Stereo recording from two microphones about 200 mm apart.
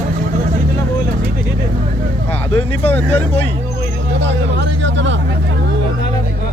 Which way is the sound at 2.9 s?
10° left (ahead or behind).